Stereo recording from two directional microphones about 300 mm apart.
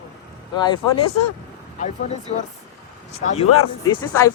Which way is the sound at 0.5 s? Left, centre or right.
Centre.